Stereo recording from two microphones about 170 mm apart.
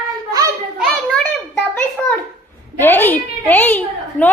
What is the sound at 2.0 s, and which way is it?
Babbling, 5° left (ahead or behind).